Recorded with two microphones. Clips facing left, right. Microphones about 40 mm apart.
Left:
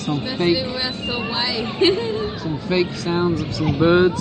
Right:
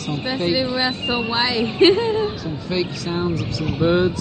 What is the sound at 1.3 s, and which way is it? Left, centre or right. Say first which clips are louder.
Speech: right 3 dB; centre.